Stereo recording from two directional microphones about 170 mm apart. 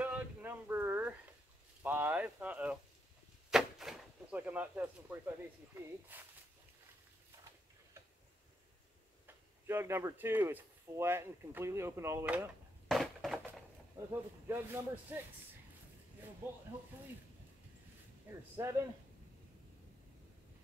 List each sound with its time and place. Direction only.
0.0 s a sound: 10° right (ahead or behind)
3.4 s door: centre (ahead or behind)
5.8 s speech: 10° right (ahead or behind)
9.2 s speech: 15° right (ahead or behind)
12.8 s crushing: centre (ahead or behind)
14.1 s speech: 15° right (ahead or behind)
18.6 s speech: 15° right (ahead or behind)